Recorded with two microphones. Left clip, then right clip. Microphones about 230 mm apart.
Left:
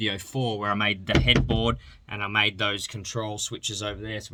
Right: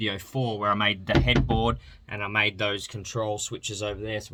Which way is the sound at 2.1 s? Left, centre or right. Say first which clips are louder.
Left 1 dB; centre.